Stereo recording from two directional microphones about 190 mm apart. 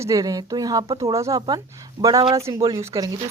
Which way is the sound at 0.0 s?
20° right (ahead or behind).